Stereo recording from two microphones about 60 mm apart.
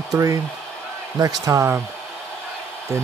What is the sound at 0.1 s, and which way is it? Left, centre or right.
Speech, right.